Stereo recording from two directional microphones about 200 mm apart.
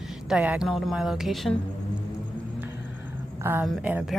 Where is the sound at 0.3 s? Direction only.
5° right (ahead or behind).